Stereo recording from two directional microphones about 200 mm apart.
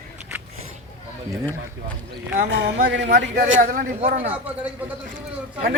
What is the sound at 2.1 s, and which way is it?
A man's voice, 60° right (ahead or behind).